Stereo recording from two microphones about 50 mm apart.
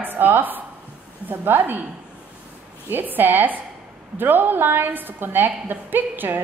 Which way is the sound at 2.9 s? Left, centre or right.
Right.